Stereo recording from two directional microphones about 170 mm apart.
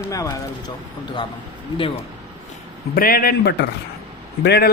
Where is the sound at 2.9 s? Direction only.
60° left (ahead or behind).